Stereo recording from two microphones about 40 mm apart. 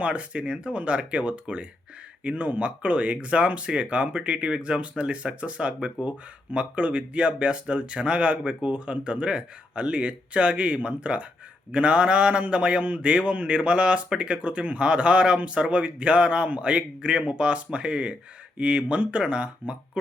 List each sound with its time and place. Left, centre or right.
0.0 s speech: right